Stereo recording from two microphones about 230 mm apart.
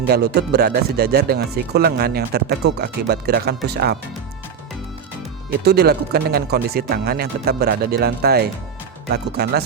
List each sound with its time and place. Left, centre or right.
0.1 s speech: right
5.6 s speech: right